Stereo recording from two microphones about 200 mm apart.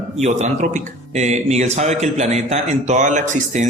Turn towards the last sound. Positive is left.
turn(degrees=-35)  # may be behind; listen again after turning